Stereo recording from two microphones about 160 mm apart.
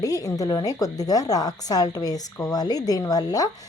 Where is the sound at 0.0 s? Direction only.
20° left (ahead or behind).